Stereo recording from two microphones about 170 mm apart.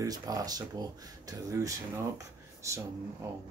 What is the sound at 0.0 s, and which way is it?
Speech, 20° right (ahead or behind).